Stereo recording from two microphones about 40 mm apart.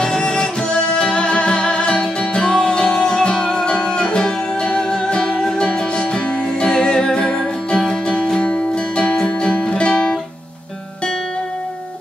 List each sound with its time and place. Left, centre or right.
0.0 s music: centre
7.8 s music: centre